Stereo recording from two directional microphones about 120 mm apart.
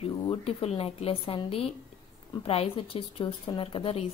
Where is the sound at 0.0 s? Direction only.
55° left (ahead or behind).